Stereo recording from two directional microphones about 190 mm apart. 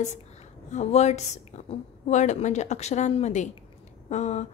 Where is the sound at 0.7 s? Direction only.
35° left (ahead or behind).